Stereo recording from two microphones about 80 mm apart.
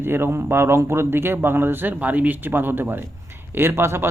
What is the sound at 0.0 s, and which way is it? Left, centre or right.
A man's voice, right.